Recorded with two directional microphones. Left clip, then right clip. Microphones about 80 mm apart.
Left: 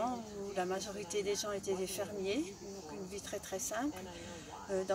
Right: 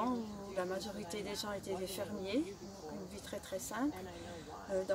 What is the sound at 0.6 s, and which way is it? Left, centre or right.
A woman's voice, centre.